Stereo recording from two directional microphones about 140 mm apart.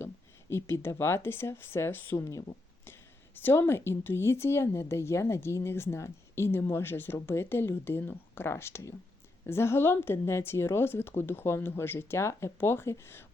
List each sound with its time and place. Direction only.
0.5 s speech: 20° left (ahead or behind)